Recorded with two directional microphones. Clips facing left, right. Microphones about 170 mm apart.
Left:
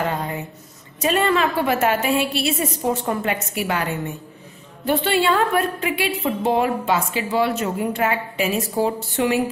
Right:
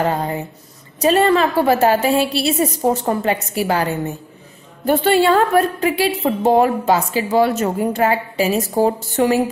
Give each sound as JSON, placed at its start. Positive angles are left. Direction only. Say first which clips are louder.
{"t": 0.9, "sound": "a woman's voice", "louder": "right 5 dB", "side_deg": -35}